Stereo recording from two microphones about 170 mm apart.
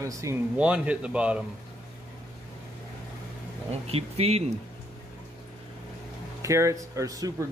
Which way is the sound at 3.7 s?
35° right (ahead or behind).